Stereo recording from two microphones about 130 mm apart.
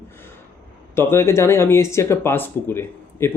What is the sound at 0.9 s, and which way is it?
Speech, 20° left (ahead or behind).